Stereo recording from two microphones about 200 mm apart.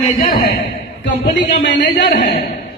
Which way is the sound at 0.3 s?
50° left (ahead or behind).